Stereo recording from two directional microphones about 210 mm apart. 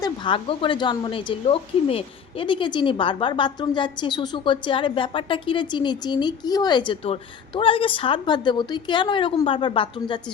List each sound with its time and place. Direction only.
0.0 s a woman's voice: 25° left (ahead or behind)